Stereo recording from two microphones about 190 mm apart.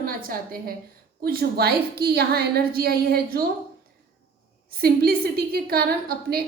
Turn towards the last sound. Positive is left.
turn(degrees=-55)  # may be behind; listen again after turning